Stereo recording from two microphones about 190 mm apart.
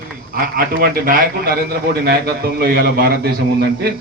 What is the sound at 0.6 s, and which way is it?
A man's voice, 50° right (ahead or behind).